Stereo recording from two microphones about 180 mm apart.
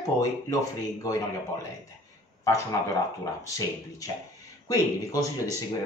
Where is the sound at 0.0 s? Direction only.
20° left (ahead or behind).